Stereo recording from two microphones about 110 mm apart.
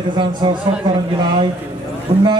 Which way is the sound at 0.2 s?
45° right (ahead or behind).